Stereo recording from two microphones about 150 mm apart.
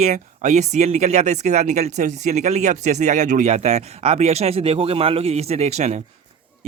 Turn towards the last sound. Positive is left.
turn(degrees=-50)  # may be behind; listen again after turning